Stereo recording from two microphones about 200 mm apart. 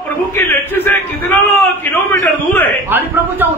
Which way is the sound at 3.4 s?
10° right (ahead or behind).